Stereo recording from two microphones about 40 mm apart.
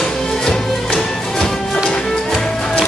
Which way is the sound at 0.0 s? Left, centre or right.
Centre.